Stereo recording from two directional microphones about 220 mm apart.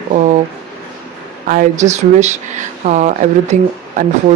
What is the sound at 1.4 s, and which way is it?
Speech, 35° right (ahead or behind).